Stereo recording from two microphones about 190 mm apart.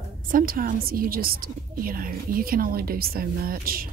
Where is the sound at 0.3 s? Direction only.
45° right (ahead or behind).